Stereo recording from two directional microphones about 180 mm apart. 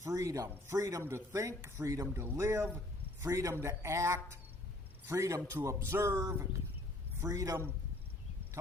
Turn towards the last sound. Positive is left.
turn(degrees=-15)  # may be behind; listen again after turning